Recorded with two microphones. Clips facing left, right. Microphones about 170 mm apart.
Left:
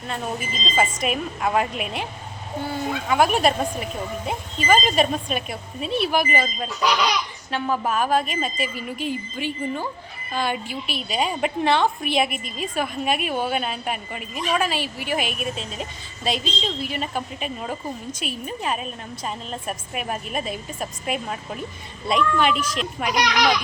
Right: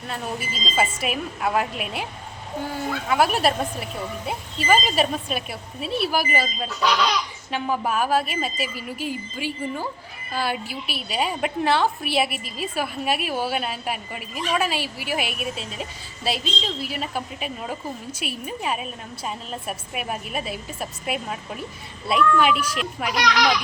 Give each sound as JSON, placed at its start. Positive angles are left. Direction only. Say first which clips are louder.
{"t": 0.8, "sound": "a woman's voice", "louder": "left 1 dB", "side_deg": -10}
{"t": 3.1, "sound": "a woman's voice", "louder": "left 1 dB", "side_deg": -5}
{"t": 6.7, "sound": "speech", "louder": "right 1 dB", "side_deg": 5}
{"t": 7.5, "sound": "a woman's voice", "louder": "left 1 dB", "side_deg": -10}
{"t": 23.1, "sound": "a child's voice", "louder": "even", "side_deg": 20}